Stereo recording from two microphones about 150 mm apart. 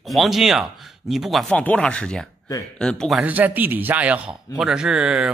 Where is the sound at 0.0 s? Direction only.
Centre (ahead or behind).